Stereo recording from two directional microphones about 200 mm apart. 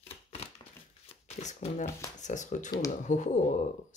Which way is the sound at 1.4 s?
35° left (ahead or behind).